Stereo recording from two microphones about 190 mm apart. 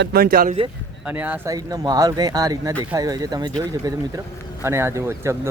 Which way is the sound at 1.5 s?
20° right (ahead or behind).